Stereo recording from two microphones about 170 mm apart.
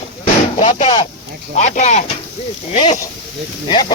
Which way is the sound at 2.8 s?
25° left (ahead or behind).